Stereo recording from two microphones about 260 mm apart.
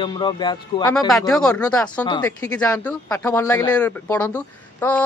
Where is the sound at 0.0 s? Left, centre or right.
Centre.